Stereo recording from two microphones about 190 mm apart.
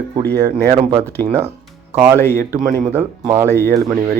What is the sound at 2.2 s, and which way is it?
A man's voice, 15° left (ahead or behind).